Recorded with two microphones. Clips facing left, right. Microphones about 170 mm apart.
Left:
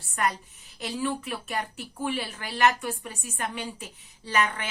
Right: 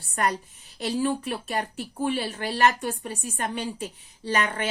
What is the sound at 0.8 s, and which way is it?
Speech, 35° right (ahead or behind).